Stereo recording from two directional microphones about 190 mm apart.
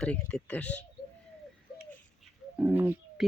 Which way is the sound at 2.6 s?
10° right (ahead or behind).